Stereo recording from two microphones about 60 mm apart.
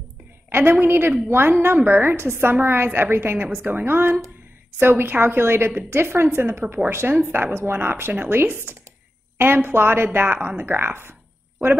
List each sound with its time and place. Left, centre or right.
0.5 s a woman's voice: right